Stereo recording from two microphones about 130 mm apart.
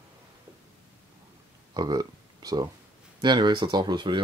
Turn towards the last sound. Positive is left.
turn(degrees=-35)  # may be behind; listen again after turning